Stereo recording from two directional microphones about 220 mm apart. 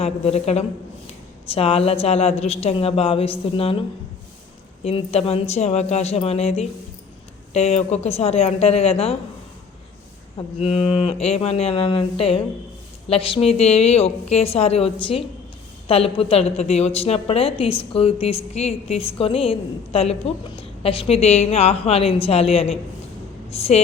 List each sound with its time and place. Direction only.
0.0 s a woman's voice: 30° left (ahead or behind)
10.3 s a woman's voice: 25° left (ahead or behind)